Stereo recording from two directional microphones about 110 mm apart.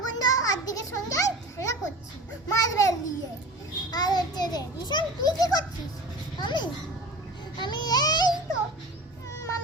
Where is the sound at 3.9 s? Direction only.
40° left (ahead or behind).